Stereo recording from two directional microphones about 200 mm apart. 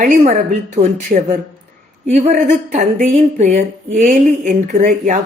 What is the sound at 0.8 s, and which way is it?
Speech, 40° right (ahead or behind).